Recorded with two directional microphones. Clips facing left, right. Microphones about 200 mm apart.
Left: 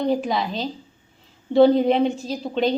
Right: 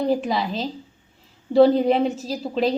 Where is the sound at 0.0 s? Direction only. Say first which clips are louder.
Even; centre (ahead or behind).